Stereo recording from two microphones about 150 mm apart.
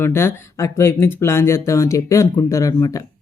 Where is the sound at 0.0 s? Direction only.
15° left (ahead or behind).